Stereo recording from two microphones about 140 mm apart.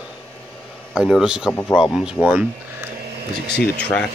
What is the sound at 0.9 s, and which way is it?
Speech, 5° right (ahead or behind).